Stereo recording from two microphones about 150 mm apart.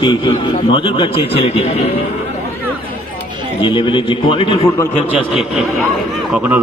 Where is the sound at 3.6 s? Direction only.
35° left (ahead or behind).